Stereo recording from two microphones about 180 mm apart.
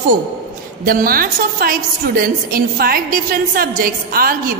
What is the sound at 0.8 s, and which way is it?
A woman's voice, 55° right (ahead or behind).